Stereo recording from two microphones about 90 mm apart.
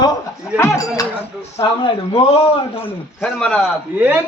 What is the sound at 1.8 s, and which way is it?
Speech, 80° left.